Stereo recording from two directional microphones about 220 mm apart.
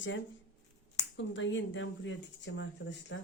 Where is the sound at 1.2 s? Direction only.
55° left (ahead or behind).